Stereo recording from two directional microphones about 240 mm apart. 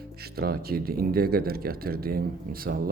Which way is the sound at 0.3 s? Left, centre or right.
Right.